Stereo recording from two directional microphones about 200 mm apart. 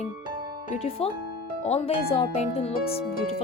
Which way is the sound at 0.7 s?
30° left (ahead or behind).